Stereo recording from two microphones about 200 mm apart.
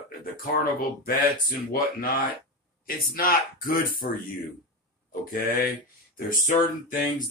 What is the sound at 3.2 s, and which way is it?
Speech, 45° left (ahead or behind).